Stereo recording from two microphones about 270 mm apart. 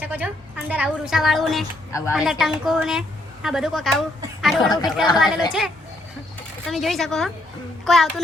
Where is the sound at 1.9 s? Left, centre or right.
Centre.